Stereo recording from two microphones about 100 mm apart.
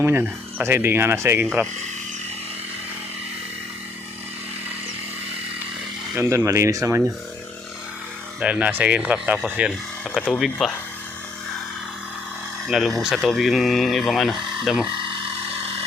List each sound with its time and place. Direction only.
0.0 s speech: 20° right (ahead or behind)
6.1 s speech: 30° right (ahead or behind)
8.4 s speech: 10° right (ahead or behind)
10.0 s speech: 10° left (ahead or behind)
12.6 s speech: centre (ahead or behind)